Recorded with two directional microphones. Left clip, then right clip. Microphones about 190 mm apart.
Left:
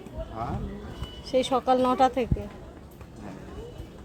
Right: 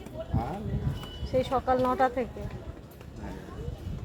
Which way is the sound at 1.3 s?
35° left (ahead or behind).